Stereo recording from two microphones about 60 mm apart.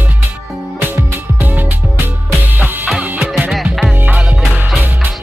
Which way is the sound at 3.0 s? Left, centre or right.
Right.